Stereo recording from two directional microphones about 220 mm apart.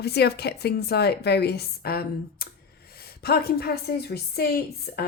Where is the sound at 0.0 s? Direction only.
50° left (ahead or behind).